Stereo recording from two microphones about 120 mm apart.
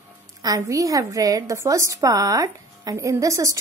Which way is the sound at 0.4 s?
30° right (ahead or behind).